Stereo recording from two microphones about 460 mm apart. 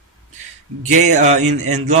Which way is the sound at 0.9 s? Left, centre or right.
Centre.